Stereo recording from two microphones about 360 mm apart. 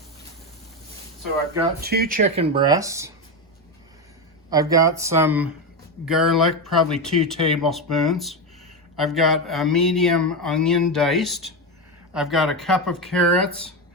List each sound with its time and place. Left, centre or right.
1.8 s speech: right; by 3.1 s centre
4.4 s speech: centre